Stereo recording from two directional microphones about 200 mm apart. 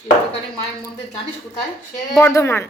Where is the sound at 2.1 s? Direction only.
15° left (ahead or behind).